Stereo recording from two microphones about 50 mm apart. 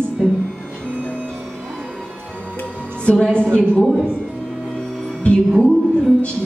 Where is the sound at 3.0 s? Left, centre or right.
Left.